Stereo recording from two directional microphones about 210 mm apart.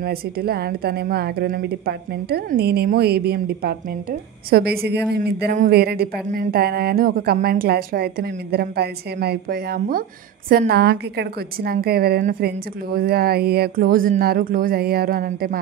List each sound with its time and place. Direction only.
0.0 s a woman's voice: 45° right (ahead or behind)